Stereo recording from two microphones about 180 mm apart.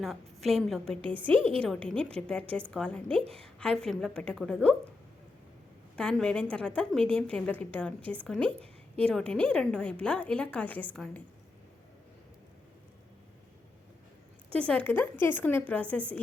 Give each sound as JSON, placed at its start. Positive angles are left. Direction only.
{"t": 0.0, "sound": "a woman's voice", "side_deg": 0}
{"t": 1.3, "sound": "a woman's voice", "side_deg": -30}
{"t": 1.6, "sound": "a woman's voice", "side_deg": 5}
{"t": 3.1, "sound": "a woman's voice", "side_deg": -30}
{"t": 3.6, "sound": "a woman's voice", "side_deg": 5}
{"t": 6.0, "sound": "a woman's voice", "side_deg": 5}
{"t": 14.7, "sound": "a woman's voice", "side_deg": 10}